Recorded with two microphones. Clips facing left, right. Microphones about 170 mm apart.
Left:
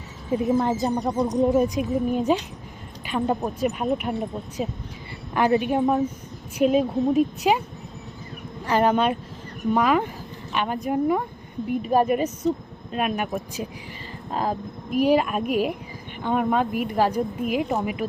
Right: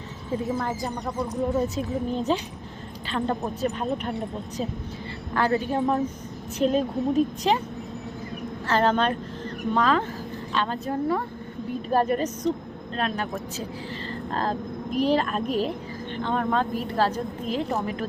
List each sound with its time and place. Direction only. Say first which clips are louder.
0.3 s speech: left 6 dB; 20° left (ahead or behind)
5.3 s speech: left 3 dB; 15° left (ahead or behind)
8.6 s speech: left 2 dB; 10° left (ahead or behind)
14.3 s insect: left 2 dB; 10° left (ahead or behind)
14.9 s speech: left 3 dB; 10° left (ahead or behind)